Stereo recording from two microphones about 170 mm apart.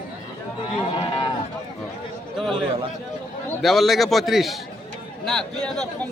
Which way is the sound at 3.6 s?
Centre (ahead or behind).